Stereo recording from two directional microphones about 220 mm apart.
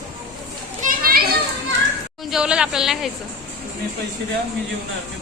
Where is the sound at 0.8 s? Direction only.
40° right (ahead or behind).